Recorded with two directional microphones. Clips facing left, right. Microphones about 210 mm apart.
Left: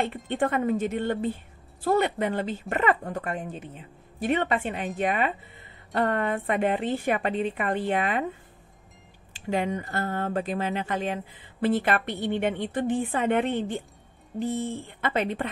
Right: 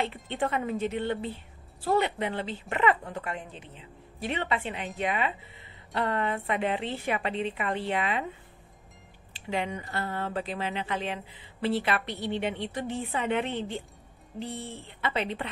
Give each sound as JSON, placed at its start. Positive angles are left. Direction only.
{"t": 0.0, "sound": "speech", "side_deg": 50}
{"t": 9.3, "sound": "speech", "side_deg": 45}